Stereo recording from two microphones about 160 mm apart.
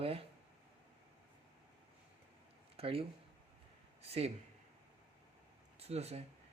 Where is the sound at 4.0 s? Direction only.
40° right (ahead or behind).